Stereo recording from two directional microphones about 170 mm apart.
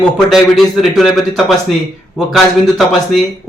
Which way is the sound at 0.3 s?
Centre (ahead or behind).